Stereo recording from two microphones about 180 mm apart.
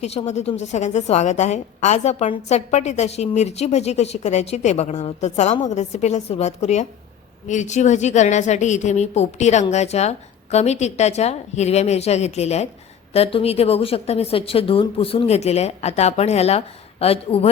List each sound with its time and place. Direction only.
0.0 s a woman's voice: 35° left (ahead or behind)